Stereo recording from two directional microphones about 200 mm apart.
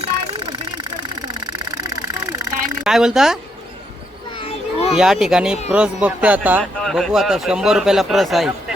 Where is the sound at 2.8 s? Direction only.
5° right (ahead or behind).